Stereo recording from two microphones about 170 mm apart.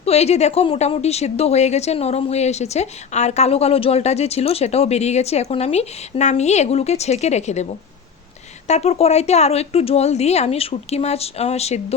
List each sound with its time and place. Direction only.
0.0 s a woman's voice: 40° left (ahead or behind)